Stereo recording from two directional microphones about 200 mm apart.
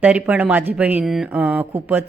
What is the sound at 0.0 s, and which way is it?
Speech, 5° right (ahead or behind).